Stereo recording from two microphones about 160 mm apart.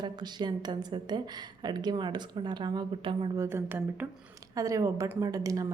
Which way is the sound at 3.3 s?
15° right (ahead or behind).